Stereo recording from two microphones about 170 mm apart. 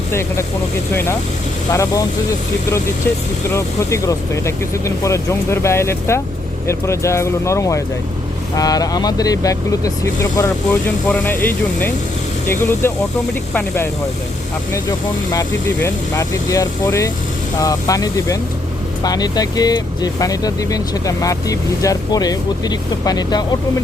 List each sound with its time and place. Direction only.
0.1 s speech: 15° left (ahead or behind)
1.7 s speech: 20° left (ahead or behind)
3.5 s speech: 15° left (ahead or behind)